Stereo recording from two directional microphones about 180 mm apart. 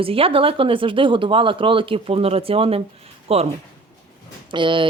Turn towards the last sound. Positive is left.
turn(degrees=-25)  # may be behind; listen again after turning